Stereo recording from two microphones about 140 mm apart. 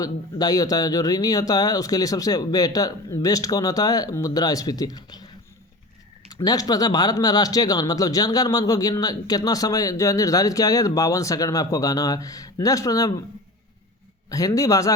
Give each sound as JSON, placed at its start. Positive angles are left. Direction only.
{"t": 0.0, "sound": "speech", "side_deg": 25}
{"t": 6.3, "sound": "speech", "side_deg": 25}
{"t": 14.3, "sound": "speech", "side_deg": 25}